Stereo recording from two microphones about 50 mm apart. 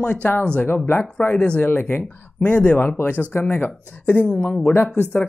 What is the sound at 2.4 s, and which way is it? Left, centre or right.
Speech, left.